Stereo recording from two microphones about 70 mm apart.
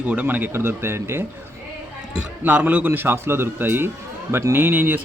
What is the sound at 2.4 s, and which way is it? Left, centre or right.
Speech, right.